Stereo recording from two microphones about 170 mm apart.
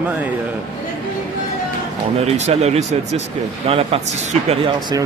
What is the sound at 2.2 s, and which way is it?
Speech, 40° right (ahead or behind).